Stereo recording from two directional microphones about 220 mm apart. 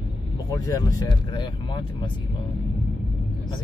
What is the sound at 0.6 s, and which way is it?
Speech, 15° left (ahead or behind).